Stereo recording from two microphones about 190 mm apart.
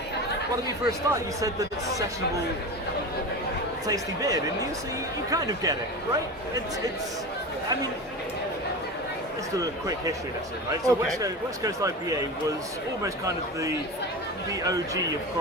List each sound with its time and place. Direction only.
0.9 s speech: 15° right (ahead or behind)
3.8 s speech: 20° right (ahead or behind)
9.6 s speech: 15° right (ahead or behind)